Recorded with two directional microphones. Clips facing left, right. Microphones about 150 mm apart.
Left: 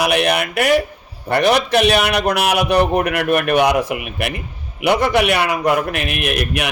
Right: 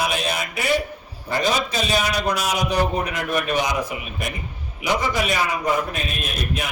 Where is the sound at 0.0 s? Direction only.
70° left (ahead or behind).